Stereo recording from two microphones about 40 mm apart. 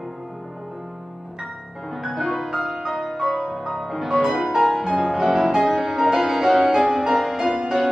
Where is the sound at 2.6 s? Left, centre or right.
Centre.